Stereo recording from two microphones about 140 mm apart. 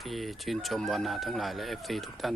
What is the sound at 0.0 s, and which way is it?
Speech, centre (ahead or behind).